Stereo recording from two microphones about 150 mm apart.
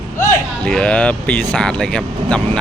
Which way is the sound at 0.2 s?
10° left (ahead or behind).